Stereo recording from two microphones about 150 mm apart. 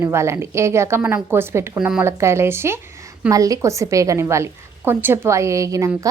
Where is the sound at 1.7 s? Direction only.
5° right (ahead or behind).